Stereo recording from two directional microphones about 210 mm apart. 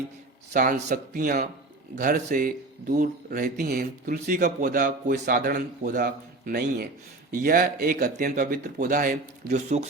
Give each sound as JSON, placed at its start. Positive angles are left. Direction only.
{"t": 0.5, "sound": "speech", "side_deg": -40}